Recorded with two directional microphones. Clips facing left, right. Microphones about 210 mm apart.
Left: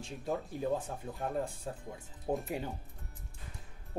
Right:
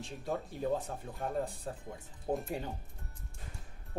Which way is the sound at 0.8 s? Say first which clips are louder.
Left 1 dB; 5° left (ahead or behind).